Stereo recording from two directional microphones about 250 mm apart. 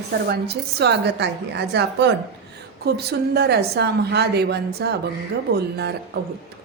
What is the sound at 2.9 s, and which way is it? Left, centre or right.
A woman's voice, right.